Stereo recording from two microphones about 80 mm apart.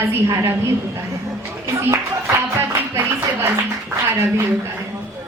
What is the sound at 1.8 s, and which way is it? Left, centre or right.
Speech, right.